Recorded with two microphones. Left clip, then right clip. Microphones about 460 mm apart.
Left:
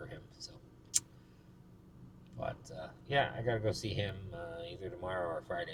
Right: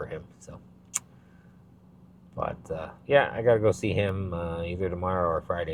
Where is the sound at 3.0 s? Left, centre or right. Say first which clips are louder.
Right 12 dB; right.